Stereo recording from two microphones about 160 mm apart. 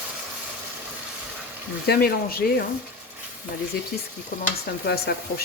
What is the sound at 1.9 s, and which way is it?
Speech, 75° left (ahead or behind).